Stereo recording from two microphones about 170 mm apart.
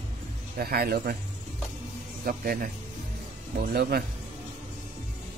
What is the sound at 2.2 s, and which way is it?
Speech, 60° right (ahead or behind).